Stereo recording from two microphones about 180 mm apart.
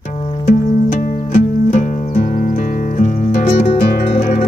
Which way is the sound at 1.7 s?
45° left (ahead or behind).